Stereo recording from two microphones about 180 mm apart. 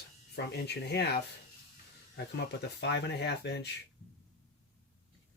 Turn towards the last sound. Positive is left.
turn(degrees=70)  # may be behind; listen again after turning